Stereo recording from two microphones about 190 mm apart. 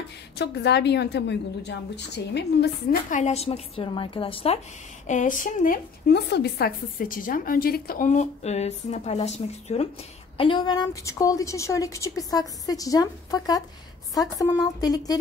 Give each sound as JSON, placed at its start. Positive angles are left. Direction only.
{"t": 0.4, "sound": "a woman's voice", "side_deg": 60}
{"t": 3.1, "sound": "a woman's voice", "side_deg": 35}
{"t": 5.0, "sound": "a woman's voice", "side_deg": 40}